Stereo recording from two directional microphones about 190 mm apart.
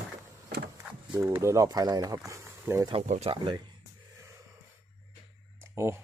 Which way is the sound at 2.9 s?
35° right (ahead or behind).